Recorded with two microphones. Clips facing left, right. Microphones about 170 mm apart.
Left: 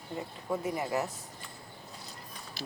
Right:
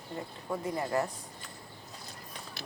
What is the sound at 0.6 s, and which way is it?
Speech, 15° left (ahead or behind).